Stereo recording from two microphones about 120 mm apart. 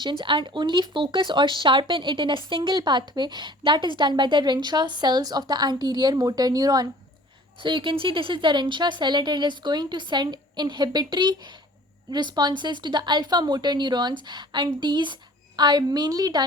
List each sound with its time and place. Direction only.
0.0 s speech: 45° right (ahead or behind)
7.6 s speech: 45° right (ahead or behind)